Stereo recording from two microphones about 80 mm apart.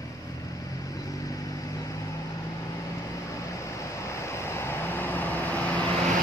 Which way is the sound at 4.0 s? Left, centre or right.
Left.